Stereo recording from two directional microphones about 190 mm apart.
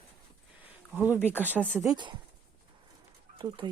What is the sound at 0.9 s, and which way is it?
Speech, 10° right (ahead or behind).